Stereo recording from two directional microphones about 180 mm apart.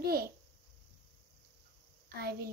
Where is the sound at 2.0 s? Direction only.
60° right (ahead or behind).